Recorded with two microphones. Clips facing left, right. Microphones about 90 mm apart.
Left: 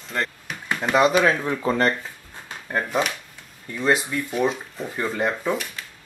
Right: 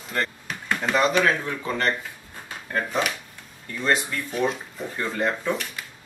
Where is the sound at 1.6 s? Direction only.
35° left (ahead or behind).